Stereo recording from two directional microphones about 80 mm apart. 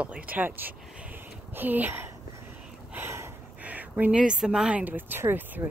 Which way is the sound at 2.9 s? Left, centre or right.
Right.